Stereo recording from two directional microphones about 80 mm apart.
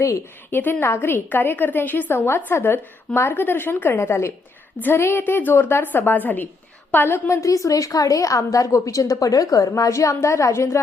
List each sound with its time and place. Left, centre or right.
0.5 s a woman's voice: left